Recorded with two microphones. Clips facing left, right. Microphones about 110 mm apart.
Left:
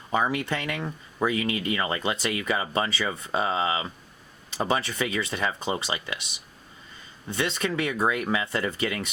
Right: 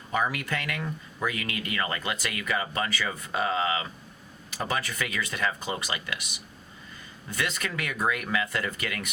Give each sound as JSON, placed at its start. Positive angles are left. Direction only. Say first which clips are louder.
{"t": 0.1, "sound": "speech", "louder": "left 3 dB", "side_deg": 25}
{"t": 7.3, "sound": "speech", "louder": "left 4 dB", "side_deg": 25}